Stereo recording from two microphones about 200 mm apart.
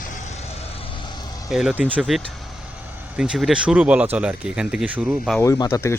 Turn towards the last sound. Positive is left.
turn(degrees=15)  # may be behind; listen again after turning